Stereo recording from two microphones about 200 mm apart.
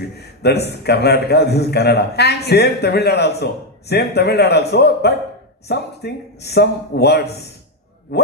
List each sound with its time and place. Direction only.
0.2 s a man's voice: 55° left (ahead or behind)